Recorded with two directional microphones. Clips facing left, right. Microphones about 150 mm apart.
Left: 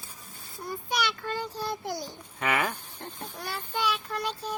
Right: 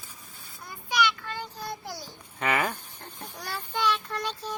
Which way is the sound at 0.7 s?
45° left (ahead or behind).